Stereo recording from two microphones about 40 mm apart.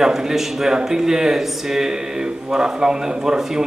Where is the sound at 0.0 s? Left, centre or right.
Centre.